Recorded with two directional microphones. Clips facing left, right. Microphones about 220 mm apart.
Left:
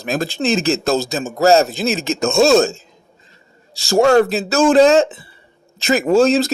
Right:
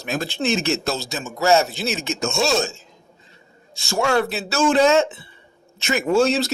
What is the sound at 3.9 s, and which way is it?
A man's voice, 40° left (ahead or behind).